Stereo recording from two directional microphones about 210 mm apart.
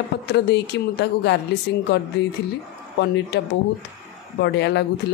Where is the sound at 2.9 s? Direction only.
55° left (ahead or behind).